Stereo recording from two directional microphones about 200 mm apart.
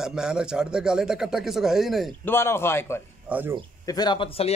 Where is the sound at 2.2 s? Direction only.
10° left (ahead or behind).